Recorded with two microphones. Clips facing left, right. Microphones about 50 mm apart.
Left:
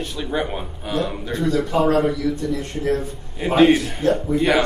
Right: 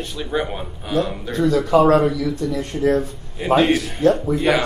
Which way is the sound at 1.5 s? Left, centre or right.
Right.